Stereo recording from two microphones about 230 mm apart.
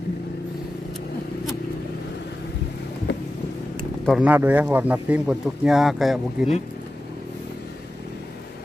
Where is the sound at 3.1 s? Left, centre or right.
Left.